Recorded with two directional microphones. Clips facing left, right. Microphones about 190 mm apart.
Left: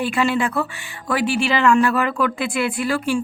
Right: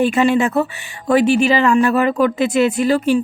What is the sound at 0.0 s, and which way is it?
Speech, 20° right (ahead or behind).